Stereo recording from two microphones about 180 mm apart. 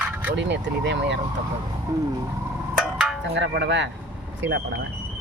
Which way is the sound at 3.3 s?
75° right (ahead or behind).